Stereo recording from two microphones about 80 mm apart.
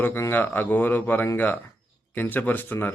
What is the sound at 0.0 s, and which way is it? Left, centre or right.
A man's voice, left.